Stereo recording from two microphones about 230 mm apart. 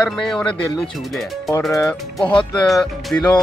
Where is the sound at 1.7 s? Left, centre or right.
Centre.